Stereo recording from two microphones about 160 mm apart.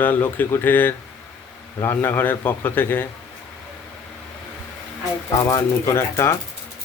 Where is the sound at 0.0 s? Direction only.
10° left (ahead or behind).